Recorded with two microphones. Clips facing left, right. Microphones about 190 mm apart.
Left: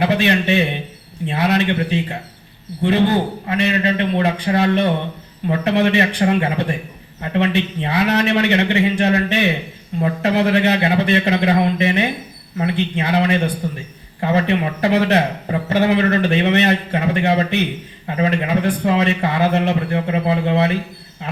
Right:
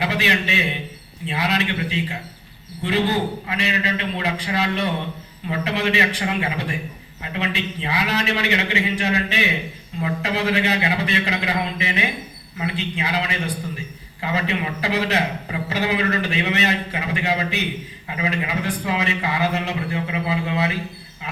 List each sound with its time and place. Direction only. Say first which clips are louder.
0.0 s a man's voice: left 6 dB; 55° left (ahead or behind)